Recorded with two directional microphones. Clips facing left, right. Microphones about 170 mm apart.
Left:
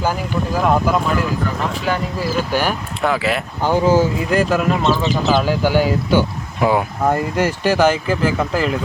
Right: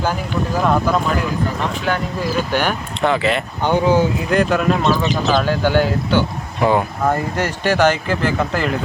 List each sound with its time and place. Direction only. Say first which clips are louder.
0.5 s speech: left 1 dB; 5° left (ahead or behind)